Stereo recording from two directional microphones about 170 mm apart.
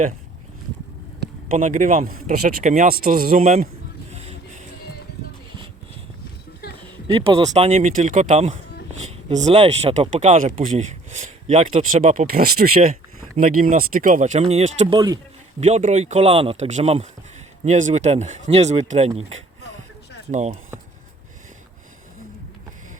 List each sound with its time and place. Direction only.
1.5 s speech: 50° right (ahead or behind)
4.1 s music: 40° right (ahead or behind)
6.8 s a sound: 30° right (ahead or behind)
7.5 s speech: 40° right (ahead or behind); by 12.8 s 60° right (ahead or behind)
12.9 s speech: 45° right (ahead or behind)
14.9 s speech: 25° right (ahead or behind)
15.6 s speech: 45° right (ahead or behind)
20.3 s speech: 40° right (ahead or behind)